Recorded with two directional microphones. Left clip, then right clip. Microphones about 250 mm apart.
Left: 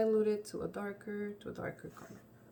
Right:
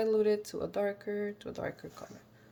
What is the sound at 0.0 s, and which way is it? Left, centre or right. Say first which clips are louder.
Speech: right 3 dB; right.